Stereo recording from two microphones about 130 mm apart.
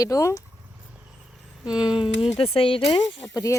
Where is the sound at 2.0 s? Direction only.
45° left (ahead or behind).